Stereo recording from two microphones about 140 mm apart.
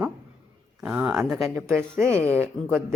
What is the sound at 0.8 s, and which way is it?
Speech, 10° right (ahead or behind).